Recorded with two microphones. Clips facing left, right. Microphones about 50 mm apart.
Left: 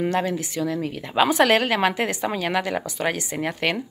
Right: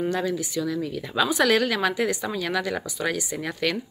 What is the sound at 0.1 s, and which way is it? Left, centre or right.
A woman's voice, left.